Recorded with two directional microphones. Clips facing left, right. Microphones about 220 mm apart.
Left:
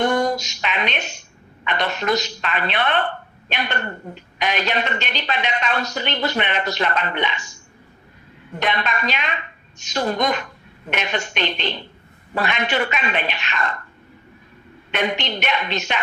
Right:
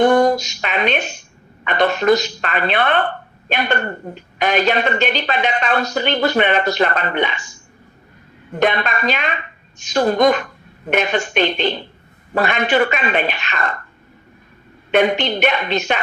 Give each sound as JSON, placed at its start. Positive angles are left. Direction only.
{"t": 0.0, "sound": "a sound", "side_deg": -55}
{"t": 1.7, "sound": "speech", "side_deg": -55}
{"t": 8.6, "sound": "speech", "side_deg": -55}
{"t": 14.9, "sound": "speech", "side_deg": -50}